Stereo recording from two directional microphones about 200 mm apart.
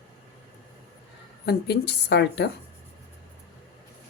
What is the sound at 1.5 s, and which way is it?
A woman's voice, 55° left (ahead or behind).